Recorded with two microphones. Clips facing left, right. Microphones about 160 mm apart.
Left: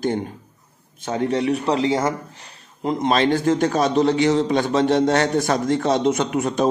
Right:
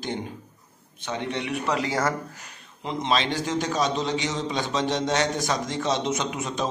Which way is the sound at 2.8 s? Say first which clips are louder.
Left 6 dB; 50° left (ahead or behind).